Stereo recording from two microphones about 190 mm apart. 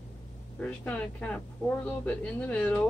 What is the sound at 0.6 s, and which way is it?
A woman's voice, 5° left (ahead or behind).